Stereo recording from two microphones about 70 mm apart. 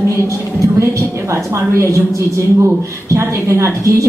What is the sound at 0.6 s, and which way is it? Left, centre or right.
Speech, right.